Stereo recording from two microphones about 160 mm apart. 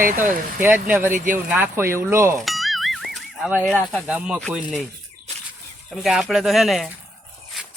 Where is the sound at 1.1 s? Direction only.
55° right (ahead or behind).